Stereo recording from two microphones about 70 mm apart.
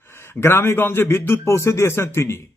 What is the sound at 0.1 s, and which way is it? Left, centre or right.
A man's voice, left.